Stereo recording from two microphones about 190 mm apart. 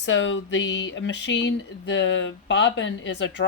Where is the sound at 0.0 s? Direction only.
70° left (ahead or behind).